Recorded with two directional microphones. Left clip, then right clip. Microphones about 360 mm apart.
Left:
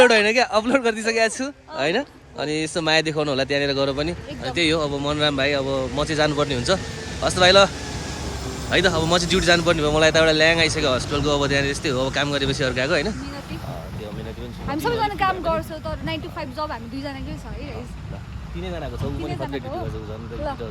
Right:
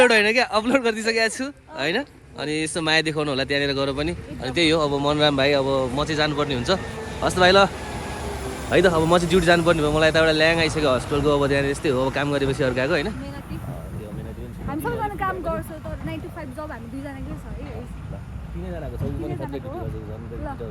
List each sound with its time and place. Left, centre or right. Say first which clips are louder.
0.0 s speech: left 1 dB; centre
5.6 s speech: right 2 dB; centre
6.0 s speech: left 2 dB; centre
8.7 s speech: right 2 dB; centre
14.7 s speech: left 4 dB; left